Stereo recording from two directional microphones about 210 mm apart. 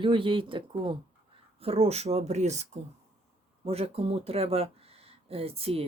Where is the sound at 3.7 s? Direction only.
30° right (ahead or behind).